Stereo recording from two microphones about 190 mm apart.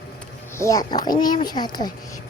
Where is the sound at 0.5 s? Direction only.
15° left (ahead or behind).